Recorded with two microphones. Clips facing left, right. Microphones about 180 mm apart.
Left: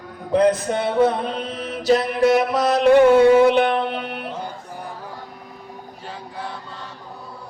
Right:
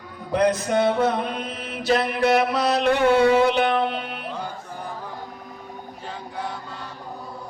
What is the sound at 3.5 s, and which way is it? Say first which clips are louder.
Music: left 2 dB; 60° left (ahead or behind).